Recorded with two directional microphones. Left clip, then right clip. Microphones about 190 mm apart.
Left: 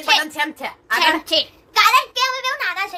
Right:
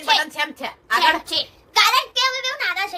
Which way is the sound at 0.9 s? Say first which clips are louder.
Left 1 dB; 30° left (ahead or behind).